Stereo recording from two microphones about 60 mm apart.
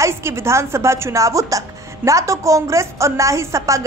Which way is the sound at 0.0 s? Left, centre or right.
Right.